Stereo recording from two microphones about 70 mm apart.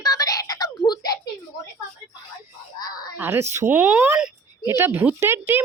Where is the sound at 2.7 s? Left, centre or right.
Left.